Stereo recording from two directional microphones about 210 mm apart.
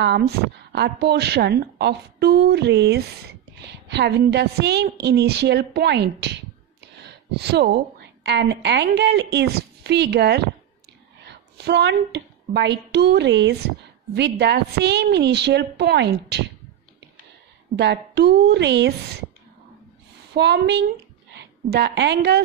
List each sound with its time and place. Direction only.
0.7 s a woman's voice: 50° right (ahead or behind)
17.7 s a woman's voice: 55° right (ahead or behind)
20.3 s a woman's voice: 50° right (ahead or behind)